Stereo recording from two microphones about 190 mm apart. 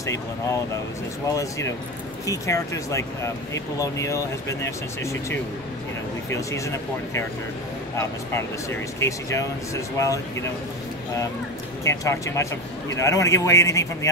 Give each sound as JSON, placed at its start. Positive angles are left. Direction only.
{"t": 0.0, "sound": "speech", "side_deg": 15}
{"t": 8.3, "sound": "speech", "side_deg": 15}
{"t": 11.8, "sound": "speech", "side_deg": 15}